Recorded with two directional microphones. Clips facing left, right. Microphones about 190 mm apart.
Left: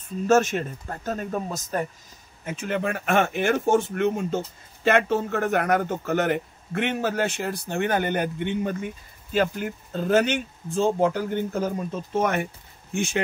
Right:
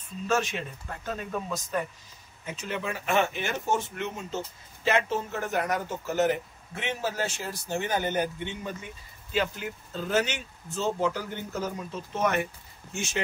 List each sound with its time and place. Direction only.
0.3 s speech: 45° left (ahead or behind)